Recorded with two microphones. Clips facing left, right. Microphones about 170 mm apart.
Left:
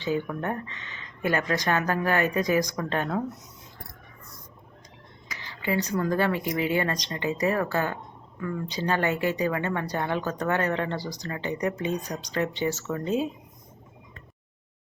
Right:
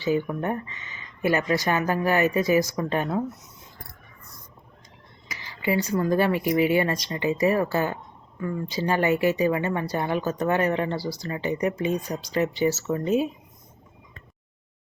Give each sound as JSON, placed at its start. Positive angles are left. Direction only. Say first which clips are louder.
{"t": 0.0, "sound": "speech", "louder": "right 3 dB", "side_deg": -10}
{"t": 5.3, "sound": "speech", "louder": "right 3 dB", "side_deg": -10}